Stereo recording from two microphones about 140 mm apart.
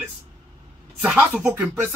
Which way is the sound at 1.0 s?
5° right (ahead or behind).